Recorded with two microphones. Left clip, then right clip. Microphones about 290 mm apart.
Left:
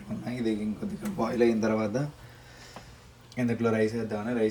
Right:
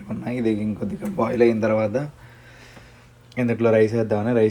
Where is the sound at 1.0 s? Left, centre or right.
Centre.